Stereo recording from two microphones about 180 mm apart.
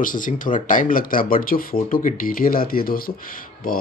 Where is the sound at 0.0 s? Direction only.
50° left (ahead or behind).